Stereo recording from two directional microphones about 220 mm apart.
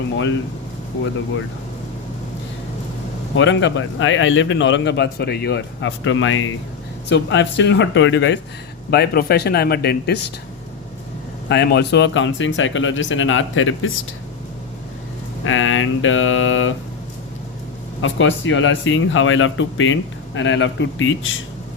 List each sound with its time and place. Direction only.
3.3 s a man's voice: 55° left (ahead or behind)
11.4 s speech: 50° left (ahead or behind)
15.4 s speech: 65° left (ahead or behind)
18.0 s speech: 60° left (ahead or behind)